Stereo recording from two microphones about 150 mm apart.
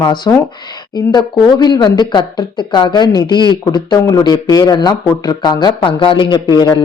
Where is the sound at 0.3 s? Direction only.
20° left (ahead or behind).